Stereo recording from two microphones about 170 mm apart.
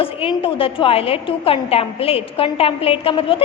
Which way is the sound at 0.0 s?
35° left (ahead or behind).